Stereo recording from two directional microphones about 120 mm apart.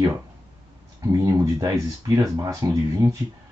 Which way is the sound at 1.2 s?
25° right (ahead or behind).